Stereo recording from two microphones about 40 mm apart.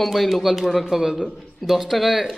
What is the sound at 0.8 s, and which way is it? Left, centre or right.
Speech, centre.